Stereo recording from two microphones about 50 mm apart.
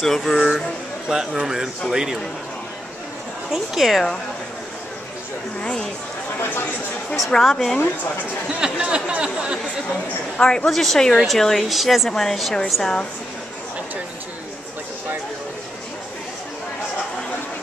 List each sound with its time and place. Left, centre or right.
0.0 s speech: centre
0.3 s speech: centre
3.5 s speech: centre
5.6 s speech: centre
7.4 s speech: centre
8.5 s speech: centre
10.4 s speech: centre
10.7 s speech: centre